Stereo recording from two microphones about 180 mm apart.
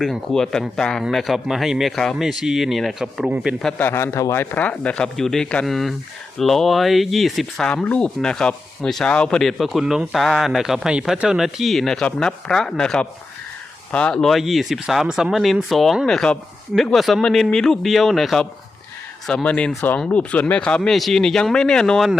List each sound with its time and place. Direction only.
0.0 s speech: centre (ahead or behind)
3.6 s speech: 5° left (ahead or behind)